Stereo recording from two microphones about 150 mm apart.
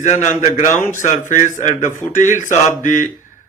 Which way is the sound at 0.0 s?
50° left (ahead or behind).